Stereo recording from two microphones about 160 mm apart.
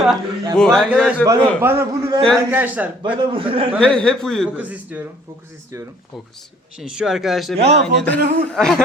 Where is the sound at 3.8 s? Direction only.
5° left (ahead or behind).